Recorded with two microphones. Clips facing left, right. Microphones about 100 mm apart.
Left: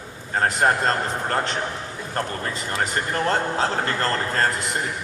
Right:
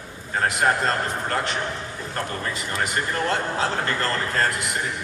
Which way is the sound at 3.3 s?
35° left (ahead or behind).